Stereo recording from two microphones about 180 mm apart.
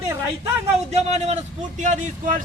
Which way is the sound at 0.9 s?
35° right (ahead or behind).